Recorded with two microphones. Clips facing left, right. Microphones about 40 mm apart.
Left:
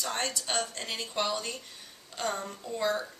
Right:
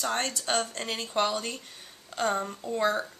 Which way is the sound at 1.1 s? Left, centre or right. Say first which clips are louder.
Right 4 dB; centre.